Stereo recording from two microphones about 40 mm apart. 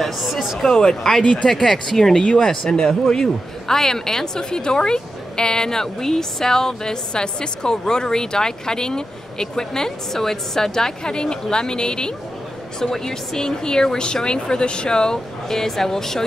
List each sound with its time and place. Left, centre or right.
0.0 s speech: centre
0.7 s a man's voice: centre
1.2 s speech: left
1.5 s a man's voice: centre